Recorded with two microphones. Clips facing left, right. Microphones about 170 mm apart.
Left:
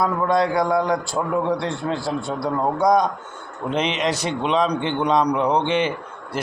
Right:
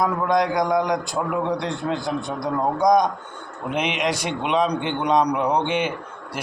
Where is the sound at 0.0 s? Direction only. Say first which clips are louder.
Left 1 dB; 15° right (ahead or behind).